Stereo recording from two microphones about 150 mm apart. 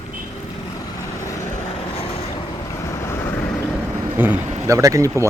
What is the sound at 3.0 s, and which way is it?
Vehicle, 20° left (ahead or behind).